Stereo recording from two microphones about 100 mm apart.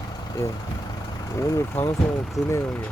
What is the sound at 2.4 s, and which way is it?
Speech, centre (ahead or behind).